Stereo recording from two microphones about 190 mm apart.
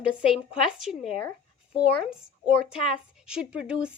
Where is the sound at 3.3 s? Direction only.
5° right (ahead or behind).